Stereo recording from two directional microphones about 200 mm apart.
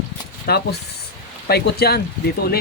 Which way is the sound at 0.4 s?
55° left (ahead or behind).